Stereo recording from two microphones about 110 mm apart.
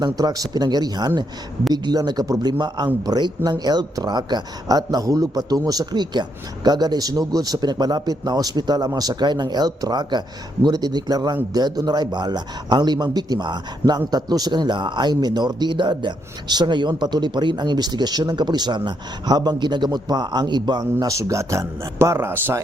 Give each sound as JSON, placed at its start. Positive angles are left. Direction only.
{"t": 0.0, "sound": "speech", "side_deg": -35}